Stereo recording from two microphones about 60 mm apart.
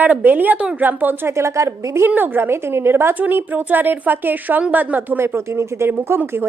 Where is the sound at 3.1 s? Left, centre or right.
Right.